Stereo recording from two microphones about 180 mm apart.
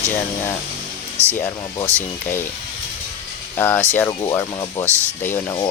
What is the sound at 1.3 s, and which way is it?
Speech, 15° left (ahead or behind).